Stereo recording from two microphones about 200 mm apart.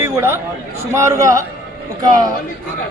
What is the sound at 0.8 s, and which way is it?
Speech, 15° right (ahead or behind).